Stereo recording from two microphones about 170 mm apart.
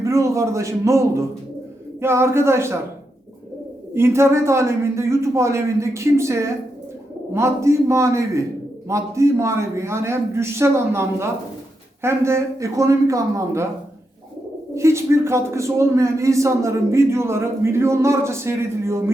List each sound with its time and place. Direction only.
0.0 s a man's voice: 15° right (ahead or behind)
3.9 s a man's voice: 15° right (ahead or behind)
14.8 s a man's voice: 15° right (ahead or behind)